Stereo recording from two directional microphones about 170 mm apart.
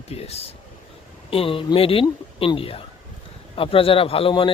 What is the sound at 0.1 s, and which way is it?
Speech, 35° left (ahead or behind).